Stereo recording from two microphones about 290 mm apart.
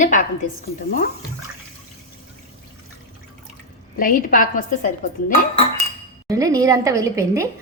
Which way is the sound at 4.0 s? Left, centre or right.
Left.